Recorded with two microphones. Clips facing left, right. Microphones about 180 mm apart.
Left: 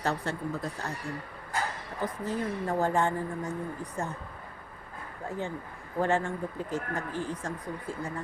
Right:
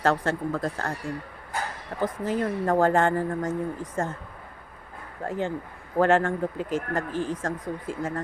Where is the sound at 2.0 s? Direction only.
90° right.